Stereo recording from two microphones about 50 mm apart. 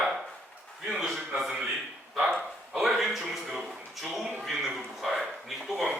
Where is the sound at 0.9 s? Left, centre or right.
Centre.